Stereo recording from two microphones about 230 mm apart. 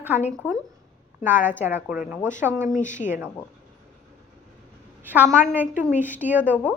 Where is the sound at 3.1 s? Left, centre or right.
Centre.